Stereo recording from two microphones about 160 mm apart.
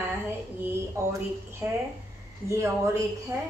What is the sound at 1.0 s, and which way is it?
Speech, 20° right (ahead or behind).